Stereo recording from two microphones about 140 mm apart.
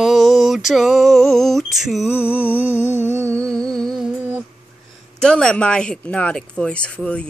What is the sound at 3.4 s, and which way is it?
Music, 5° left (ahead or behind).